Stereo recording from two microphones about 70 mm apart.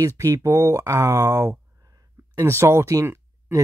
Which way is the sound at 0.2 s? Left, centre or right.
Right.